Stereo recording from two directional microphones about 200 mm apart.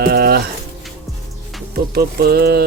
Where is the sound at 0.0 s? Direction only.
50° right (ahead or behind).